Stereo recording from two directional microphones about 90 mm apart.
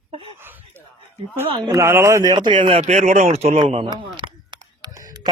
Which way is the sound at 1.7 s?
30° right (ahead or behind).